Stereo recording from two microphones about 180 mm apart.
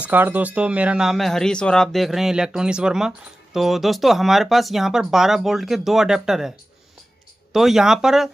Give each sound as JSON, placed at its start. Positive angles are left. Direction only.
{"t": 0.0, "sound": "speech", "side_deg": -10}
{"t": 7.5, "sound": "speech", "side_deg": 0}